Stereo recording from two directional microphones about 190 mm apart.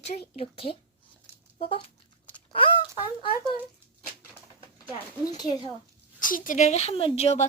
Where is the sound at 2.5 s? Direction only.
30° left (ahead or behind).